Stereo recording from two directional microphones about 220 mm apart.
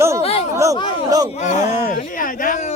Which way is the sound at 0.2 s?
30° left (ahead or behind).